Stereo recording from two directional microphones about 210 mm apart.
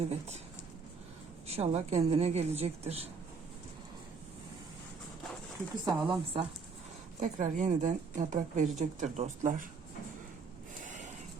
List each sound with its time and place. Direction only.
1.5 s a woman's voice: 30° right (ahead or behind)
5.8 s a woman's voice: 20° right (ahead or behind)
7.2 s a woman's voice: 35° right (ahead or behind)
10.8 s a sound: 35° right (ahead or behind)